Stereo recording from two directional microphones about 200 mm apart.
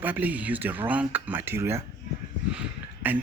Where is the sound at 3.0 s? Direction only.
10° right (ahead or behind).